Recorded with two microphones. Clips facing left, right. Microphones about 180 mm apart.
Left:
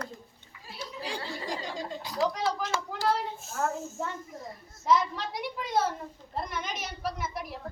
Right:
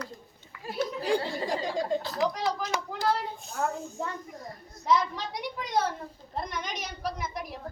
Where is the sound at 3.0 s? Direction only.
Centre (ahead or behind).